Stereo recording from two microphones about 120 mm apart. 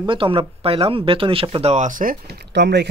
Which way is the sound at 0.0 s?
45° right (ahead or behind).